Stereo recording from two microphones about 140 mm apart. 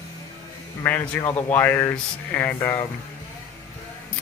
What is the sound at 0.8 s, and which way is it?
Speech, 10° left (ahead or behind).